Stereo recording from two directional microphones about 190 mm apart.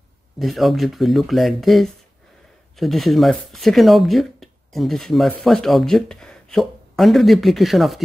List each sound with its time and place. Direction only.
0.4 s speech: centre (ahead or behind)